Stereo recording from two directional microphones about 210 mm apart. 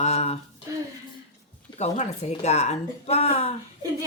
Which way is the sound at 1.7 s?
35° left (ahead or behind).